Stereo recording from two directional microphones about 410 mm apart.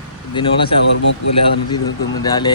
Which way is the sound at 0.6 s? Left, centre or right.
Left.